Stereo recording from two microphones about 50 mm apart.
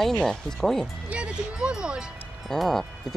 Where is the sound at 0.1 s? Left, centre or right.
Centre.